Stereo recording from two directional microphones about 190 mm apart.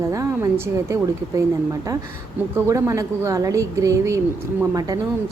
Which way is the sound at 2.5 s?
15° right (ahead or behind).